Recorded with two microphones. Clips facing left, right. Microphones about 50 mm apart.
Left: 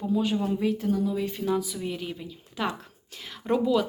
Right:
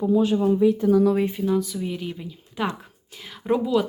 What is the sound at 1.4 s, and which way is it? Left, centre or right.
Speech, centre.